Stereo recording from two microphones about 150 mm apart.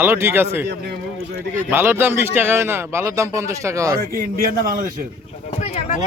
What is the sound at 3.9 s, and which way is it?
Speech, 70° right (ahead or behind).